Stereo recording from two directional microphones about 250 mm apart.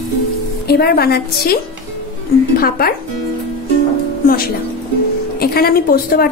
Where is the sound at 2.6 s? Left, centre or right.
Left.